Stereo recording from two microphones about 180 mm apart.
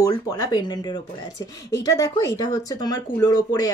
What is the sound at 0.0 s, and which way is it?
Speech, 25° left (ahead or behind).